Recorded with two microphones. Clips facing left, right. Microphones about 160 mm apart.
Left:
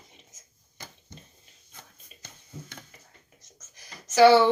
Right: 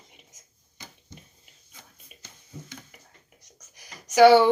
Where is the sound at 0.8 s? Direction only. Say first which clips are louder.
Left 1 dB; 50° left (ahead or behind).